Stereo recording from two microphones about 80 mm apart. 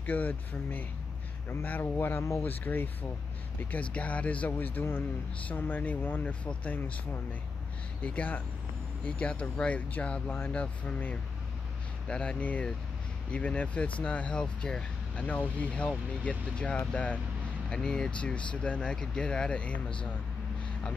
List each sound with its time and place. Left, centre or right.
0.0 s speech: left